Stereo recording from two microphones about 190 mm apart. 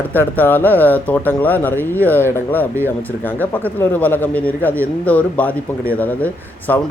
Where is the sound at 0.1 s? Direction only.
10° left (ahead or behind).